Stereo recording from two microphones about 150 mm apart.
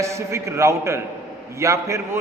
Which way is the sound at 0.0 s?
20° right (ahead or behind).